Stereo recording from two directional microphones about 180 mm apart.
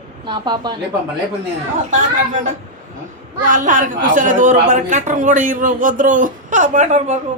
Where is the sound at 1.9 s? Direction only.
45° right (ahead or behind).